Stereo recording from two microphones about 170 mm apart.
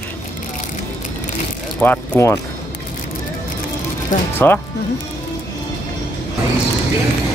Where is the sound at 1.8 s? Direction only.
10° left (ahead or behind).